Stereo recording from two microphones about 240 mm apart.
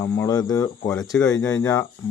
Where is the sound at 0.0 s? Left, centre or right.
Centre.